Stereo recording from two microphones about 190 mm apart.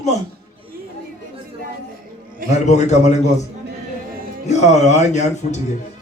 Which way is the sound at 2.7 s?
35° left (ahead or behind).